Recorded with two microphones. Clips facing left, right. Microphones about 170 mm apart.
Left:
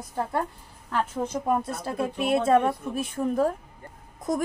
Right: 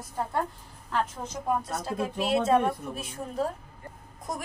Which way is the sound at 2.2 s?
55° left (ahead or behind).